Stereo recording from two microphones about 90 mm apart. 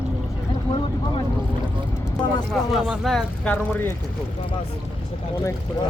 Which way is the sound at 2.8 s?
Centre (ahead or behind).